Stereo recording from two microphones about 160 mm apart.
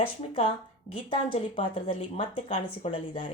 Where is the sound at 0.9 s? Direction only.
40° left (ahead or behind).